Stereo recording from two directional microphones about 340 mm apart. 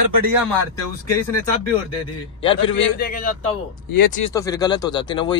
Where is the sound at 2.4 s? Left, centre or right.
Centre.